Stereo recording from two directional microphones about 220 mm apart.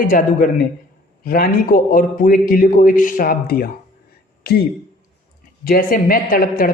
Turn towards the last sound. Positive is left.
turn(degrees=40)  # may be behind; listen again after turning